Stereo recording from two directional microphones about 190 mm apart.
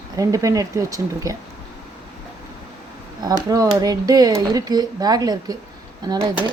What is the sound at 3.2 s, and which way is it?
Speech, 20° right (ahead or behind).